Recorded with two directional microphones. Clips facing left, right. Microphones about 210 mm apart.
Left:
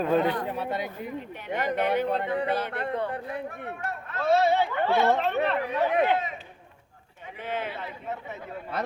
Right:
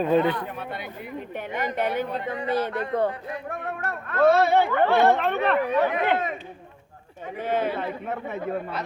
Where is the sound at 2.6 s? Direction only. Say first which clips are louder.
Right 5 dB; 45° right (ahead or behind).